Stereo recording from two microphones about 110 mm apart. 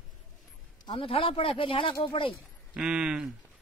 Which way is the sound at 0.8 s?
55° left (ahead or behind).